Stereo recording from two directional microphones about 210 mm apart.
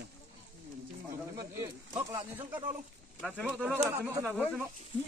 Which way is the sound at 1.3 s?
15° right (ahead or behind).